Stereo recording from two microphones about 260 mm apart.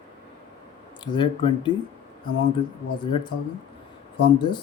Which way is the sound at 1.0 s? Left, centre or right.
Centre.